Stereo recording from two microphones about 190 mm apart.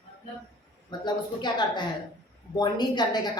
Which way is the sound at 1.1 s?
25° left (ahead or behind).